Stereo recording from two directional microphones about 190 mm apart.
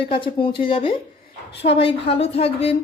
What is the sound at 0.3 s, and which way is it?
A woman's voice, 30° left (ahead or behind).